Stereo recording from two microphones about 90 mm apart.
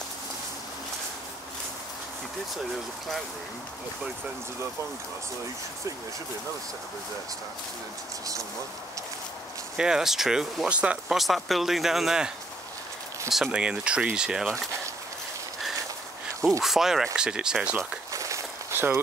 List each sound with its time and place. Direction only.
9.8 s speech: 5° right (ahead or behind)
11.1 s speech: centre (ahead or behind)
13.3 s speech: 5° right (ahead or behind)
16.6 s speech: 5° right (ahead or behind)
18.1 s walk: 35° right (ahead or behind)